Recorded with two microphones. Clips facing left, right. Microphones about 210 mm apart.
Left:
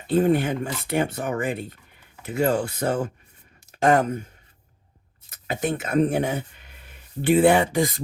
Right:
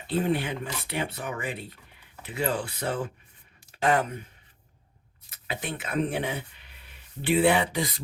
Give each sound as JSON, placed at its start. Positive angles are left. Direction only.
{"t": 0.1, "sound": "speech", "side_deg": 45}
{"t": 5.3, "sound": "speech", "side_deg": 45}